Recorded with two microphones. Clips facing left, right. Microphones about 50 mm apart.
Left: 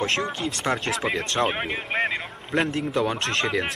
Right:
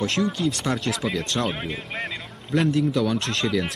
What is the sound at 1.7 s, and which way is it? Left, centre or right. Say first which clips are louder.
Speech: left 5 dB; centre.